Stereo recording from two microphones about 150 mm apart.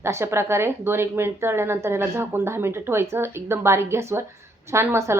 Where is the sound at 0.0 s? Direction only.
15° right (ahead or behind).